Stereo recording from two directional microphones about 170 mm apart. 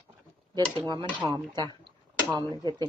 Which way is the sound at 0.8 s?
25° right (ahead or behind).